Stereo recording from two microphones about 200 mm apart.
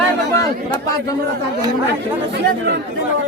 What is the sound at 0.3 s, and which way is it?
Speech, 15° left (ahead or behind).